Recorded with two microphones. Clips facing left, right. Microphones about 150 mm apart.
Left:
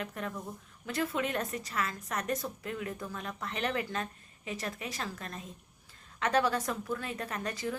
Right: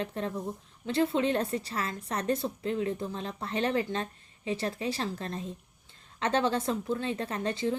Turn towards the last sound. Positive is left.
turn(degrees=-25)  # may be behind; listen again after turning